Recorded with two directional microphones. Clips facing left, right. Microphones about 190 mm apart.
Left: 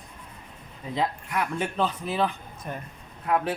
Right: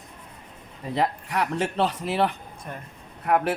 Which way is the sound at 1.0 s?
75° right (ahead or behind).